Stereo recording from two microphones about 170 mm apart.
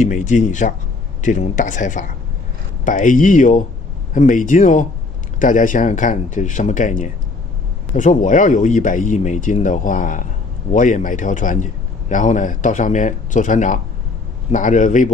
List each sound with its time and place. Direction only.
0.0 s a man's voice: 45° left (ahead or behind)